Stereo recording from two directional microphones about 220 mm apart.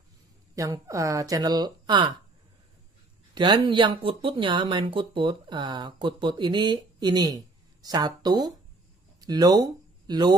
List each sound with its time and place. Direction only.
0.6 s speech: 15° right (ahead or behind)
3.3 s speech: 20° right (ahead or behind)